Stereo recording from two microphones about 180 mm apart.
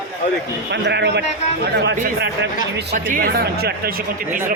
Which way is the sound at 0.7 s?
70° right (ahead or behind).